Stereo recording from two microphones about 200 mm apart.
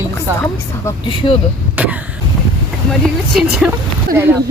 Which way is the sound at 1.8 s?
5° right (ahead or behind).